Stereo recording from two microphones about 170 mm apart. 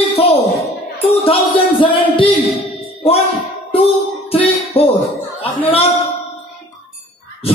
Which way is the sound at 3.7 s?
35° left (ahead or behind).